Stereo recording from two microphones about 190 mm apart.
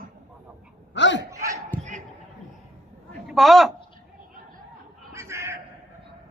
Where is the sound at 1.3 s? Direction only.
15° right (ahead or behind).